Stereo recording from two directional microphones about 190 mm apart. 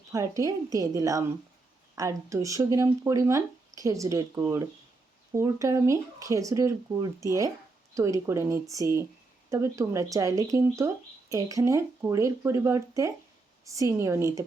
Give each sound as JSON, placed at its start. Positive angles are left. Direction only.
{"t": 0.1, "sound": "speech", "side_deg": -15}